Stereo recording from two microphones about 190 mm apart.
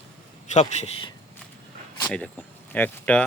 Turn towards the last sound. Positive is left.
turn(degrees=10)  # may be behind; listen again after turning